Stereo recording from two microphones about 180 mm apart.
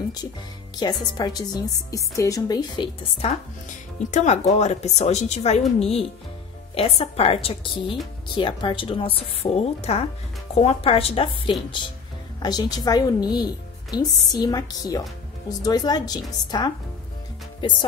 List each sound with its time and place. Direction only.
0.7 s speech: 20° left (ahead or behind)
4.1 s speech: 40° left (ahead or behind)